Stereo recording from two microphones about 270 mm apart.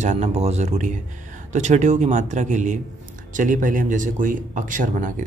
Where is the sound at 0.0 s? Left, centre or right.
Right.